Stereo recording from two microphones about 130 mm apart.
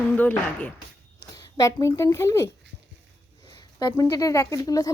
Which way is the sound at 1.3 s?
30° left (ahead or behind).